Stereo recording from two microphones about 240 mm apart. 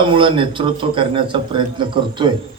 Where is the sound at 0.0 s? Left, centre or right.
Right.